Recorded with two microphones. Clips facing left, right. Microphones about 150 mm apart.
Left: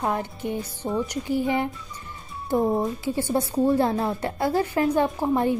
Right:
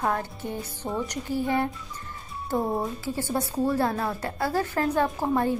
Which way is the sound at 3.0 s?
20° left (ahead or behind).